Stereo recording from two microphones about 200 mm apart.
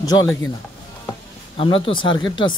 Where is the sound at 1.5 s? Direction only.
25° left (ahead or behind).